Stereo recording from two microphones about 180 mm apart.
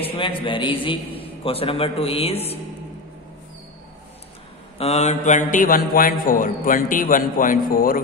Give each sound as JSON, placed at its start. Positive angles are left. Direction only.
{"t": 0.0, "sound": "a man's voice", "side_deg": 30}
{"t": 4.7, "sound": "a man's voice", "side_deg": 35}